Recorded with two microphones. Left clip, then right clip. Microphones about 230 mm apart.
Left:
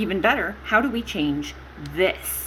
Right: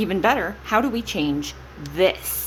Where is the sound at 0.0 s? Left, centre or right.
Right.